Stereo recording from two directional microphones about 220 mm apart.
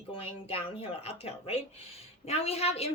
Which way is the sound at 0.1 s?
25° left (ahead or behind).